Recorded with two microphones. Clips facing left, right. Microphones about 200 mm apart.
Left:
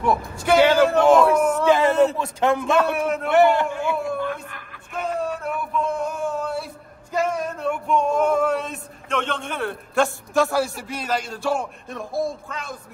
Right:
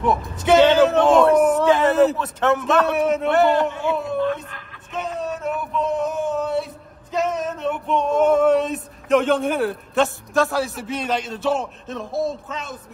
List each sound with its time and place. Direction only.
0.6 s a man's voice: centre (ahead or behind)
1.7 s a sound: centre (ahead or behind)
2.1 s speech: 10° left (ahead or behind)
2.6 s a man's voice: centre (ahead or behind)
5.0 s a sound: centre (ahead or behind)
7.6 s male singing: 10° left (ahead or behind)
8.3 s a man's voice: centre (ahead or behind)
12.0 s speech: 20° right (ahead or behind)